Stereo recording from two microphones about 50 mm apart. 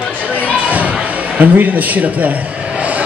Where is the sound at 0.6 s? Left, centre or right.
Right.